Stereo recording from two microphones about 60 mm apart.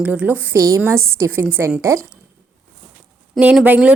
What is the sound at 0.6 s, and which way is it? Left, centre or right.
Speech, right.